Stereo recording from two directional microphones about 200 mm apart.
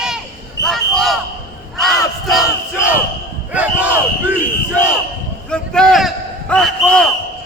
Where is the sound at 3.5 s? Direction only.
5° right (ahead or behind).